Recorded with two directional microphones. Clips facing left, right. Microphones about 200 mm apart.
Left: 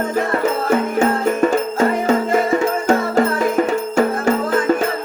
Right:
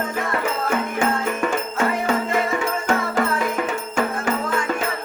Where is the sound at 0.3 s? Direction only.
40° left (ahead or behind).